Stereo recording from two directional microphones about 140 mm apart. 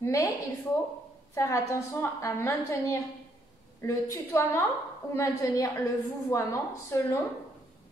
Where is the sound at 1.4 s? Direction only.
20° left (ahead or behind).